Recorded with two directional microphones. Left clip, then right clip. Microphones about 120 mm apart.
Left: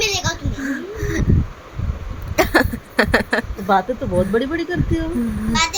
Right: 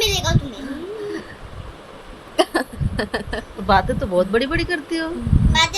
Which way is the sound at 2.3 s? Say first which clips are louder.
Left 3 dB; 75° left (ahead or behind).